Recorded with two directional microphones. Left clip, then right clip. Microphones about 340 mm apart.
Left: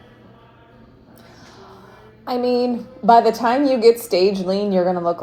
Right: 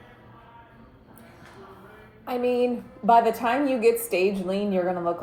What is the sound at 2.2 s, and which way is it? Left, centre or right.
A woman's voice, left.